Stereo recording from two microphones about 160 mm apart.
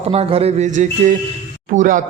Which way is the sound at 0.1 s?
40° right (ahead or behind).